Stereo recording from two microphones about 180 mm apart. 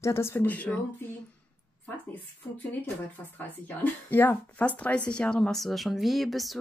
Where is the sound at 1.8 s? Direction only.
10° left (ahead or behind).